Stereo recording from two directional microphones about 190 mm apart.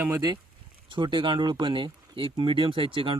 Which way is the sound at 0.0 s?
20° right (ahead or behind).